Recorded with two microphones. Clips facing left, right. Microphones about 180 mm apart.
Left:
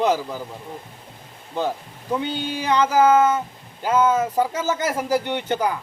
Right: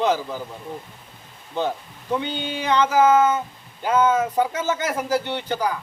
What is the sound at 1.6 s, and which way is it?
Speech, 5° left (ahead or behind).